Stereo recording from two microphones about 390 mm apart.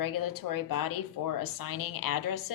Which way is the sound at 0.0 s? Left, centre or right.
Left.